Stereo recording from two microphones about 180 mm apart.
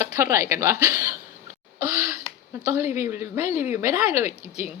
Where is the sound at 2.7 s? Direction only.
15° right (ahead or behind).